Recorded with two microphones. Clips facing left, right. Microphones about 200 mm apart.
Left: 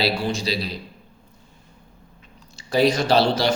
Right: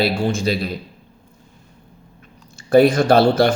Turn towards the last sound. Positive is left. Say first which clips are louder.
# right 5 dB
turn(degrees=-55)  # may be behind; listen again after turning